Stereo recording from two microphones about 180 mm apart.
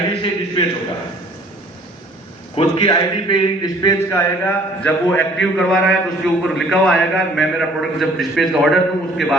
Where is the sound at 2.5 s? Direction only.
30° left (ahead or behind); by 5.3 s 10° left (ahead or behind).